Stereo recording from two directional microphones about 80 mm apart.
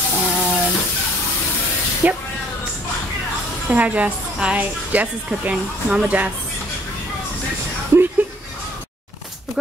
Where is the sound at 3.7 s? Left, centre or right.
Centre.